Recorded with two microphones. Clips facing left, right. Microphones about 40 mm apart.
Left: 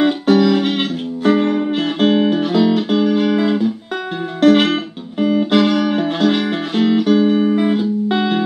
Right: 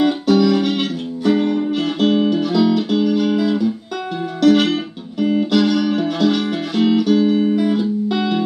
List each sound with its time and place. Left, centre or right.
0.0 s music: left